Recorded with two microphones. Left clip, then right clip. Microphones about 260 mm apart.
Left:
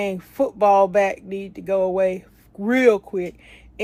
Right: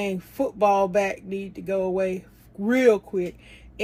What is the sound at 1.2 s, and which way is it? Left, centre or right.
Speech, left.